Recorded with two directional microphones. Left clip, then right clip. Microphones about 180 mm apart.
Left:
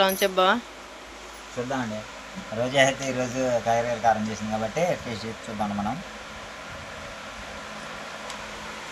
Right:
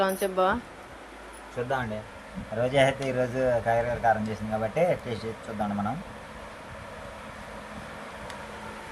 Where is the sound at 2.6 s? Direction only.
25° right (ahead or behind).